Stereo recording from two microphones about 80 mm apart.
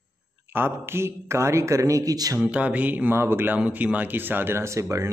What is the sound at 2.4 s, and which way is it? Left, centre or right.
Speech, centre.